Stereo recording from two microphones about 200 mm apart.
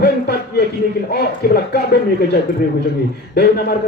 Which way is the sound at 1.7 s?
50° left (ahead or behind).